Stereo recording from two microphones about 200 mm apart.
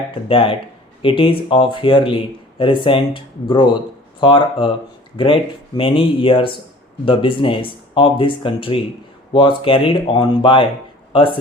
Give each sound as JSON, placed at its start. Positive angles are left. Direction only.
{"t": 0.1, "sound": "speech", "side_deg": 25}